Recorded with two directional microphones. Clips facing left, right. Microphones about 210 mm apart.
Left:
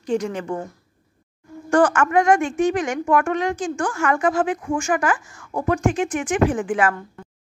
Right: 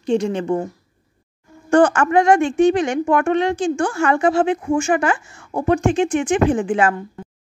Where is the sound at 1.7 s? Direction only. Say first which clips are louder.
Right 3 dB; 25° right (ahead or behind).